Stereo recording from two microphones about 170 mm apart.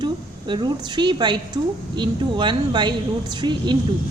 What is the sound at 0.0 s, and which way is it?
A woman's voice, 25° right (ahead or behind).